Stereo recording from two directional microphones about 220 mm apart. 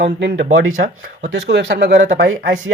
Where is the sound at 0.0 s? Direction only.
55° right (ahead or behind).